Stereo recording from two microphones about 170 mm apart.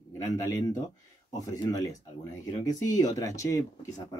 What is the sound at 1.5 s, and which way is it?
Speech, 20° left (ahead or behind).